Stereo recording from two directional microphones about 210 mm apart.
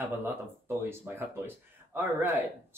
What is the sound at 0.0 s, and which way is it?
Speech, 10° right (ahead or behind).